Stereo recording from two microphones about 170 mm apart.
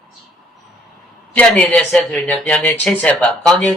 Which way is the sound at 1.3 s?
5° left (ahead or behind).